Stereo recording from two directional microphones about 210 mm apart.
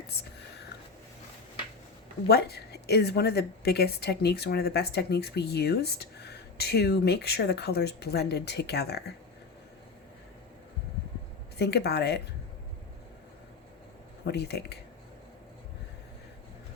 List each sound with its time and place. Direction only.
2.2 s a woman's voice: 50° left (ahead or behind)
11.5 s a woman's voice: 50° left (ahead or behind)
14.3 s a woman's voice: 50° left (ahead or behind)